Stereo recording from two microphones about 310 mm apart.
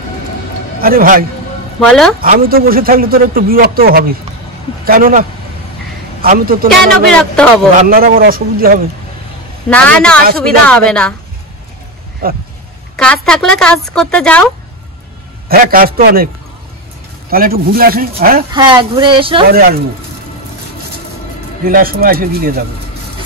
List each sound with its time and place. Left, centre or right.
0.7 s a man's voice: right
1.8 s a woman's voice: centre
2.1 s a man's voice: right
6.2 s a man's voice: right
7.1 s a woman's voice: centre
7.8 s a man's voice: right
9.7 s a woman's voice: centre
12.2 s a man's voice: right
12.9 s a woman's voice: centre
15.4 s a man's voice: right
17.3 s a man's voice: right
18.5 s speech: centre
19.5 s a man's voice: right
21.6 s a man's voice: right